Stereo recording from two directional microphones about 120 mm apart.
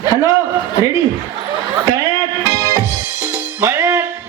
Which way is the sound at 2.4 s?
25° right (ahead or behind).